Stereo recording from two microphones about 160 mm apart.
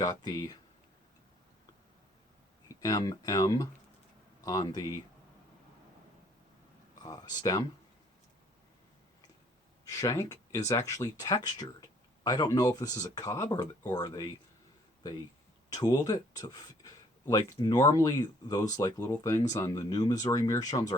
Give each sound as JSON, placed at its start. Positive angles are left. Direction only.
{"t": 0.0, "sound": "speech", "side_deg": 25}
{"t": 2.8, "sound": "speech", "side_deg": 25}
{"t": 7.0, "sound": "speech", "side_deg": 25}
{"t": 9.8, "sound": "speech", "side_deg": 20}
{"t": 15.7, "sound": "speech", "side_deg": 25}